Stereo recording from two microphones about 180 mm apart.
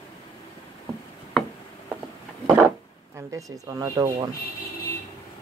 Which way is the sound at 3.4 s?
20° right (ahead or behind).